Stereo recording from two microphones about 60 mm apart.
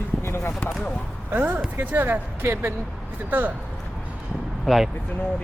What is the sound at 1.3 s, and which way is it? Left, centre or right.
Speech, right.